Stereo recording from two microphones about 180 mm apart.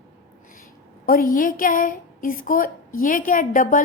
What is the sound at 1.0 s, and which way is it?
A woman's voice, 50° left (ahead or behind).